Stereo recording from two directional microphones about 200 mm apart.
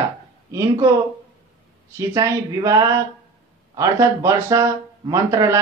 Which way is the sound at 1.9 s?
15° right (ahead or behind).